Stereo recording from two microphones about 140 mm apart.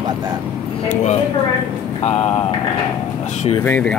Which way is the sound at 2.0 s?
50° left (ahead or behind).